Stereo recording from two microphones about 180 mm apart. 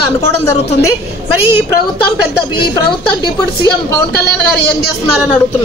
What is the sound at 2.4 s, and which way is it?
Speech, 60° left (ahead or behind).